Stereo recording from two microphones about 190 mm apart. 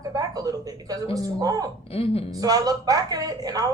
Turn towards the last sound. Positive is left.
turn(degrees=-20)  # may be behind; listen again after turning